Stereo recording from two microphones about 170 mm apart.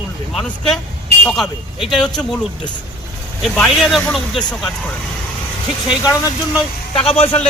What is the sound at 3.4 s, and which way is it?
Speech, centre (ahead or behind).